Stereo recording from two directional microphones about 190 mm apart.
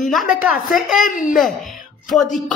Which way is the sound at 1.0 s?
45° left (ahead or behind).